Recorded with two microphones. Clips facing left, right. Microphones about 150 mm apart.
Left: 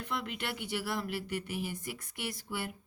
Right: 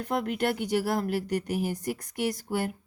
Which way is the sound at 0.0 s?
45° right (ahead or behind).